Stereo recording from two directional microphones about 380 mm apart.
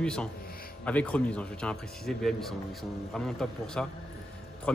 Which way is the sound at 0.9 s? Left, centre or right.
Centre.